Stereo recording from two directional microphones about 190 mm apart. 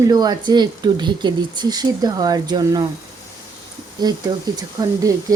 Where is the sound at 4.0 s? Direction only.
20° right (ahead or behind).